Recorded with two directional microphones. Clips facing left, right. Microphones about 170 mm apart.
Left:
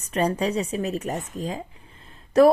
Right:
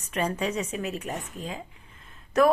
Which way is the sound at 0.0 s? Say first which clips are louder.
Left 5 dB; 35° left (ahead or behind).